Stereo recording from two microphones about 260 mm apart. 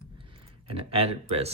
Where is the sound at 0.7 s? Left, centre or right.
Right.